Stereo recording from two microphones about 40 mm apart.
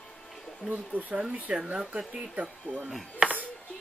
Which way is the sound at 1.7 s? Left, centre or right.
Right.